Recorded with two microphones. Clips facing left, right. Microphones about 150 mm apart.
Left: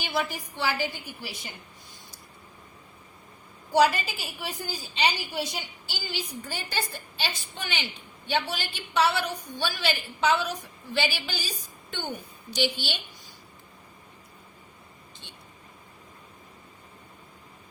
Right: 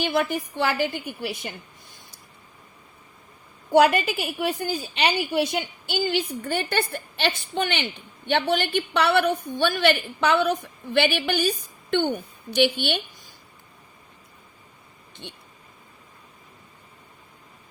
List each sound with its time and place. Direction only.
0.0 s a woman's voice: 55° right (ahead or behind)
3.7 s a woman's voice: 60° right (ahead or behind)